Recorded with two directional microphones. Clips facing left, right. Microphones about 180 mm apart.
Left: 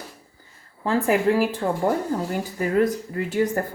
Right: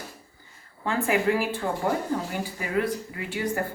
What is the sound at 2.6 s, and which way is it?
Speech, 45° left (ahead or behind).